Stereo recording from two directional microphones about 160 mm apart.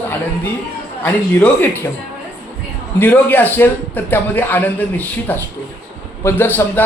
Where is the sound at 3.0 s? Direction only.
10° left (ahead or behind).